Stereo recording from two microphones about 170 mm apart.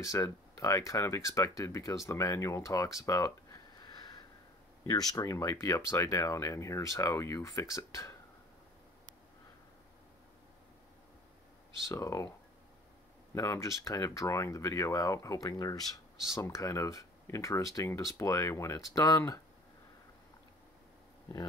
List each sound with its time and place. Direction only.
0.0 s speech: 20° left (ahead or behind)
4.8 s speech: 20° left (ahead or behind)
11.9 s speech: 20° left (ahead or behind)